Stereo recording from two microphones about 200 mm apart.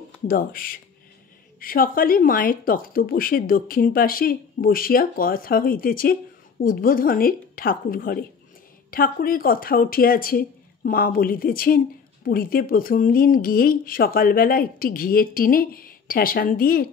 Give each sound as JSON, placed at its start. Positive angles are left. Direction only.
{"t": 0.3, "sound": "speech", "side_deg": 45}